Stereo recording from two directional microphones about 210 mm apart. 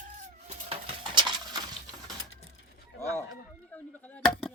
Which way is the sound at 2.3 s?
65° left (ahead or behind).